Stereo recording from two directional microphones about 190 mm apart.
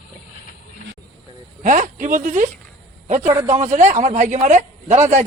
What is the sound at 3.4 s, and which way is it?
A man's voice, 35° right (ahead or behind).